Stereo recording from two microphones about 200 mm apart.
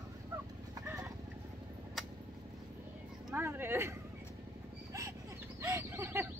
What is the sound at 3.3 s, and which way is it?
Speech, 10° right (ahead or behind).